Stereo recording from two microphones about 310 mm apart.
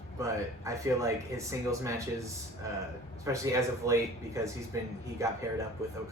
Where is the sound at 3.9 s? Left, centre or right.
Centre.